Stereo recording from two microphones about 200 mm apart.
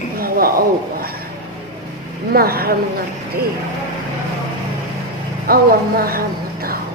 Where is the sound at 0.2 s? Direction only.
50° right (ahead or behind).